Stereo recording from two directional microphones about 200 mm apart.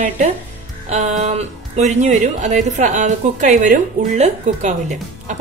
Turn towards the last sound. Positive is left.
turn(degrees=-35)  # may be behind; listen again after turning